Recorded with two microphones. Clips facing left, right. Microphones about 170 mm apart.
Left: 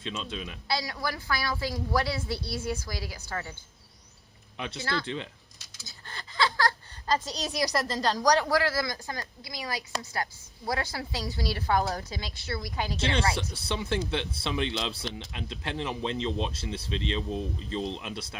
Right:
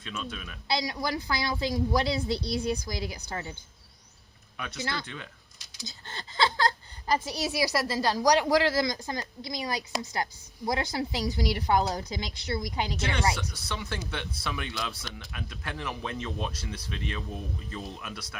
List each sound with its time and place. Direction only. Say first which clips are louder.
0.0 s speech: left 2 dB; 25° left (ahead or behind)
0.7 s a woman's voice: right 2 dB; 20° right (ahead or behind)
4.5 s speech: left 3 dB; 25° left (ahead or behind)
4.8 s speech: left 2 dB; 20° right (ahead or behind)
5.0 s speech: left 7 dB; 25° left (ahead or behind)
5.8 s a sound: right 3 dB; 25° right (ahead or behind)
7.3 s a woman's voice: right 2 dB; 10° right (ahead or behind)
13.0 s speech: left 2 dB; 30° left (ahead or behind)